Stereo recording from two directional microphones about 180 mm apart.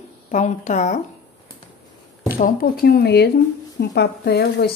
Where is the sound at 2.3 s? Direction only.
50° left (ahead or behind).